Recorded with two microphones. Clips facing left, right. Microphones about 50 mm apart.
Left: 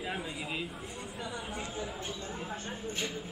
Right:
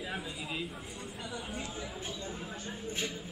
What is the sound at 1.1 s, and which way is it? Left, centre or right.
Speech, centre.